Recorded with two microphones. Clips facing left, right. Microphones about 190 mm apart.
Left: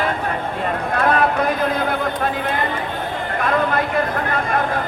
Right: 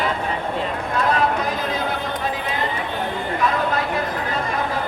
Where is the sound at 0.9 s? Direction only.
55° left (ahead or behind).